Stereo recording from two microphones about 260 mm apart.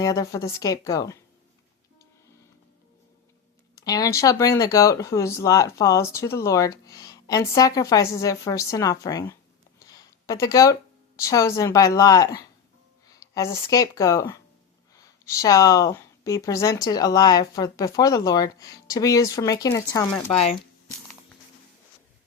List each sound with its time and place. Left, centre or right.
0.0 s speech: centre
3.8 s speech: centre
20.3 s speech: left